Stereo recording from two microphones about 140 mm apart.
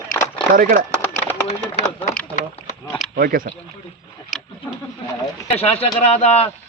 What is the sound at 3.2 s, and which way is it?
Speech, 90° right.